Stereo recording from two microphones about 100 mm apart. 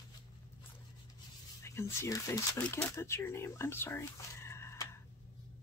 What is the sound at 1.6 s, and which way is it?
Speech, 25° left (ahead or behind).